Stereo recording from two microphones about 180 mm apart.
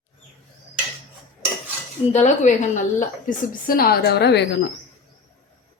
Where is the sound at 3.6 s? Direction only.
55° left (ahead or behind).